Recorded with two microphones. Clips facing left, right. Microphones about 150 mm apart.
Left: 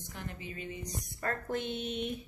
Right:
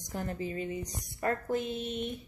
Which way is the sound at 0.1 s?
40° right (ahead or behind).